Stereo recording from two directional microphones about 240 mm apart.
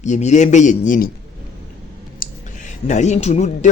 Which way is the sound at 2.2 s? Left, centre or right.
Left.